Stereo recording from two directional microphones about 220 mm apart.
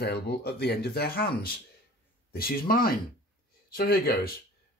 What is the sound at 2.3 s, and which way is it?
Speech, 40° left (ahead or behind).